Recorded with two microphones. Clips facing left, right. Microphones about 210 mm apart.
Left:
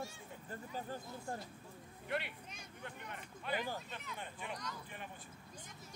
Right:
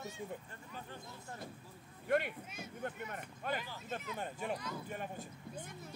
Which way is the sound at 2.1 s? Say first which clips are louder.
Right 8 dB; 50° right (ahead or behind).